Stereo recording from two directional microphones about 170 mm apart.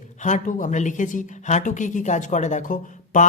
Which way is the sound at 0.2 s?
45° left (ahead or behind).